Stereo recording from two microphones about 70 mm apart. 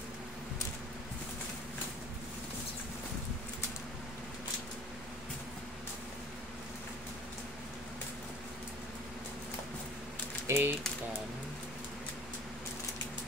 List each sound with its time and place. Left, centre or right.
10.4 s speech: right